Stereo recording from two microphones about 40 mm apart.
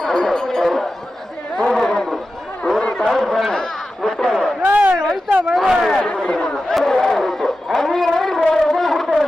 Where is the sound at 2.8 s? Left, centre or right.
Left.